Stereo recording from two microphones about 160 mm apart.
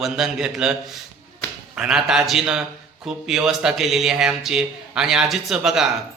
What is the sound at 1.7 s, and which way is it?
Speech, 5° right (ahead or behind).